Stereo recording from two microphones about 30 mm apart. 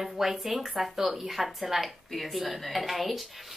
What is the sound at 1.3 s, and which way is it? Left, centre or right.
A woman's voice, centre.